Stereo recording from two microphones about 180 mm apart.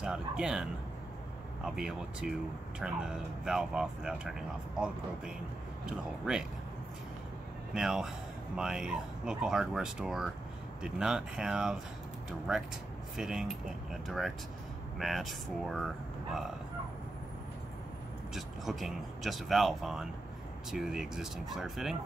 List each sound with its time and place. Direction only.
0.0 s speech: 5° right (ahead or behind)
7.7 s speech: 5° right (ahead or behind)
18.3 s speech: centre (ahead or behind)